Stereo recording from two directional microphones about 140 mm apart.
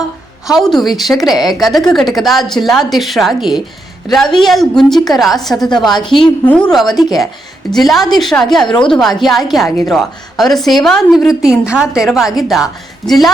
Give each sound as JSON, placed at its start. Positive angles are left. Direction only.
{"t": 0.4, "sound": "a woman's voice", "side_deg": 0}
{"t": 1.4, "sound": "a woman's voice", "side_deg": 30}
{"t": 1.6, "sound": "a woman's voice", "side_deg": 0}